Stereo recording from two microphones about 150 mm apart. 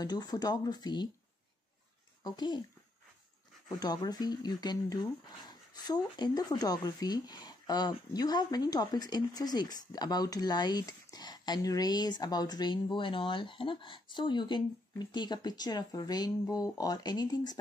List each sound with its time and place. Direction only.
0.0 s speech: 30° left (ahead or behind)
2.2 s speech: 30° left (ahead or behind)
3.8 s speech: 25° left (ahead or behind)